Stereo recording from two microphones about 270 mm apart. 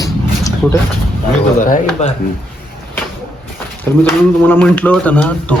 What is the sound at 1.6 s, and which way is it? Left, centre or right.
Speech, left.